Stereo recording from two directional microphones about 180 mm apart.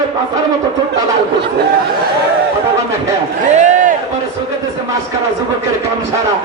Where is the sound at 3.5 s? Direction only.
45° right (ahead or behind).